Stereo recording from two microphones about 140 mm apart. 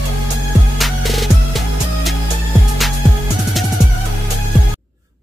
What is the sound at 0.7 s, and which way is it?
Music, centre (ahead or behind).